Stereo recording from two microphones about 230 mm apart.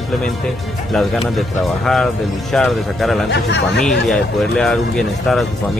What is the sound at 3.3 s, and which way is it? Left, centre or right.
Speech, left.